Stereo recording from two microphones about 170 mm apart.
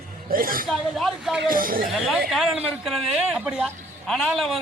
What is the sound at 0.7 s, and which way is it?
Speech, centre (ahead or behind).